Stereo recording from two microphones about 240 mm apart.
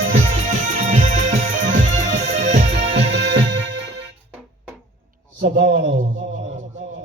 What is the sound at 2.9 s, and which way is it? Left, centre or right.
Music, right.